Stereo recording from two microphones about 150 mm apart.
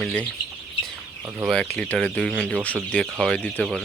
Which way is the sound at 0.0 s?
10° left (ahead or behind).